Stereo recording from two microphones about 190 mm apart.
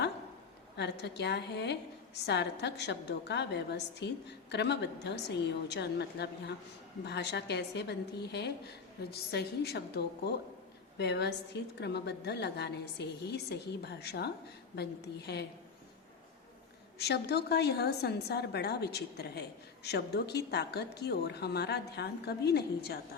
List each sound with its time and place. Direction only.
0.8 s a woman's voice: 65° left (ahead or behind)
17.0 s a woman's voice: 60° left (ahead or behind)